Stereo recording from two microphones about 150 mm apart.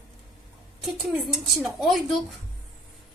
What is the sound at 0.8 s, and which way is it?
Speech, 5° right (ahead or behind).